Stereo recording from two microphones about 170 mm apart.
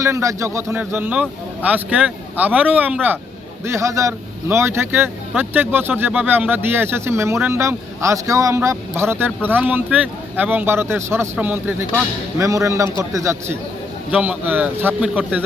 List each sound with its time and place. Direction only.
0.0 s a man's voice: 15° right (ahead or behind)